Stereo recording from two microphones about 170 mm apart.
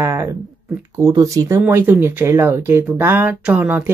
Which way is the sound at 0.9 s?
20° right (ahead or behind).